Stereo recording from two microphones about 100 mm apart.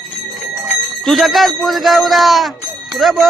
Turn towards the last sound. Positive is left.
turn(degrees=0)  # may be behind; listen again after turning